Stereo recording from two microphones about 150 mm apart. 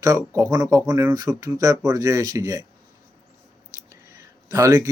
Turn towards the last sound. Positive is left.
turn(degrees=-20)  # may be behind; listen again after turning